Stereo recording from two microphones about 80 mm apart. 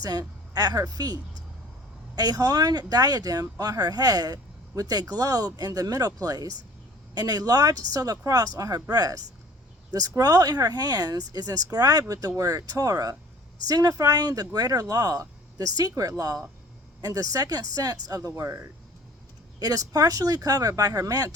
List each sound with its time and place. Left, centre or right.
0.0 s a woman's voice: right
18.3 s speech: right
19.5 s speech: right